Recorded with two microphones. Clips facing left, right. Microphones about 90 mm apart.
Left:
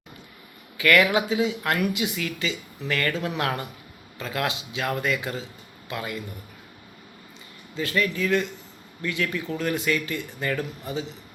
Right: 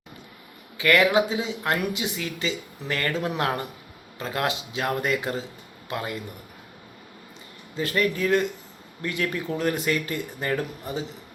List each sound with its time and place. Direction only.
0.8 s speech: 25° right (ahead or behind)
7.8 s speech: 40° right (ahead or behind)